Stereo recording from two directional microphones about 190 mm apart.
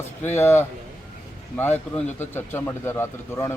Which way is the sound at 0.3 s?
15° left (ahead or behind).